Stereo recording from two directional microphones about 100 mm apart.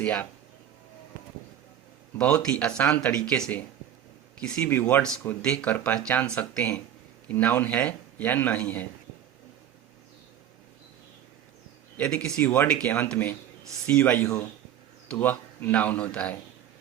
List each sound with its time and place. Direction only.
0.0 s a man's voice: 15° left (ahead or behind)
2.1 s a man's voice: 10° left (ahead or behind)
11.9 s a man's voice: 10° left (ahead or behind)